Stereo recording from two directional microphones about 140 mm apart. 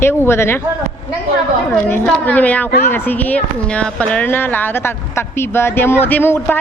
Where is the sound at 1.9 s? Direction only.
10° left (ahead or behind).